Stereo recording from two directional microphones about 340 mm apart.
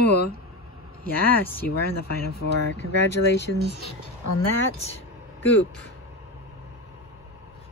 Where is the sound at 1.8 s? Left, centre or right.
Left.